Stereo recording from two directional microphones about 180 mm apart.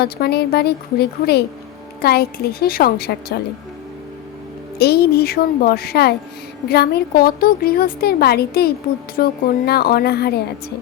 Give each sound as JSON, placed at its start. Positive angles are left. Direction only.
{"t": 0.0, "sound": "a woman's voice", "side_deg": 60}
{"t": 4.8, "sound": "a woman's voice", "side_deg": 60}